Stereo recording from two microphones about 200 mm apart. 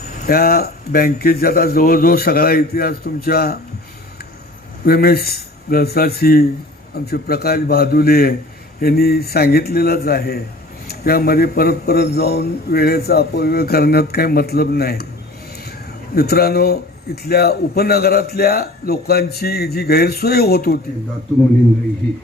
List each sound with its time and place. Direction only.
0.3 s a man's voice: 50° left (ahead or behind)
4.9 s a man's voice: 50° left (ahead or behind)
16.1 s a man's voice: 50° left (ahead or behind)